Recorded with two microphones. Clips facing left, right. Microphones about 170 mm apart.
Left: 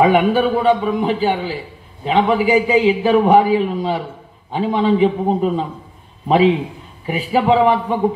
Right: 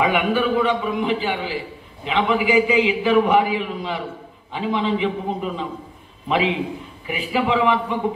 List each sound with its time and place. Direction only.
0.0 s a man's voice: 35° left (ahead or behind)